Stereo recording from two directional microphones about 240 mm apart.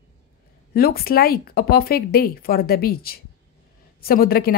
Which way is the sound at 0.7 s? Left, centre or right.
Left.